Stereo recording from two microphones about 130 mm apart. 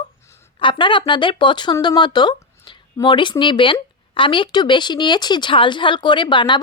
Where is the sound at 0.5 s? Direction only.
40° left (ahead or behind).